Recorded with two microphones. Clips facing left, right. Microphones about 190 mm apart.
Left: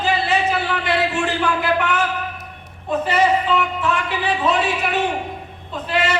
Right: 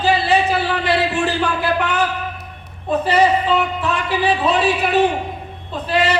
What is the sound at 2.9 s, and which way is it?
Speech, 35° right (ahead or behind).